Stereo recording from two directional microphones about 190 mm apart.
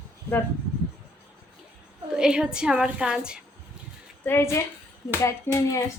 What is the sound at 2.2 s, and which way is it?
A woman's voice, 5° right (ahead or behind).